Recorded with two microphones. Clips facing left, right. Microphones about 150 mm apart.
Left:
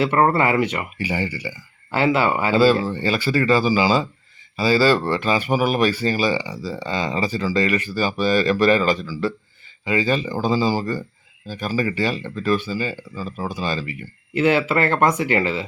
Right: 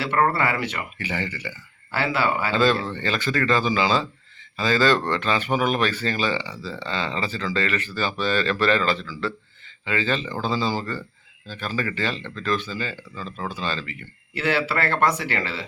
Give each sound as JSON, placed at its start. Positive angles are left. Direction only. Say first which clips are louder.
{"t": 0.0, "sound": "speech", "louder": "left 4 dB", "side_deg": 25}